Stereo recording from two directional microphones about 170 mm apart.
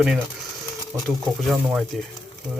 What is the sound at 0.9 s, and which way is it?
Speech, 15° right (ahead or behind).